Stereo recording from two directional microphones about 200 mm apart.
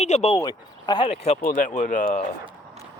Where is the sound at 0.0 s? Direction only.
35° left (ahead or behind).